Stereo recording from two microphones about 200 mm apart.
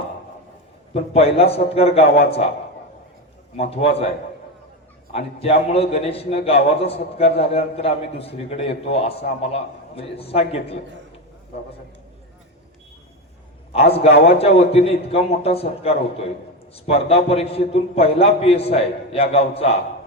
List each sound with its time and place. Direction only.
0.9 s a man's voice: 30° left (ahead or behind)
2.0 s a man's voice: 50° left (ahead or behind)
3.6 s a man's voice: 30° left (ahead or behind)
5.1 s a man's voice: 30° left (ahead or behind)
13.8 s a man's voice: 30° left (ahead or behind)